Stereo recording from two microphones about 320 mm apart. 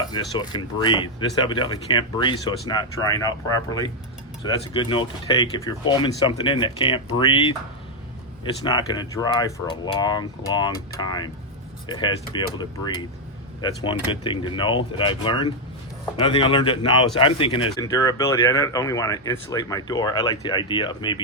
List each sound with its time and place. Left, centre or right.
0.0 s speech: centre
8.6 s speech: centre